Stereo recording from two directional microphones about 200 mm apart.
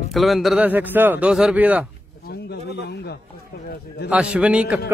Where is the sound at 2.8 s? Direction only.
55° left (ahead or behind).